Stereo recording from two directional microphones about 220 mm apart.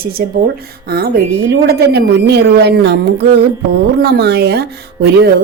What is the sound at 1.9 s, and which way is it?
Speech, 50° right (ahead or behind).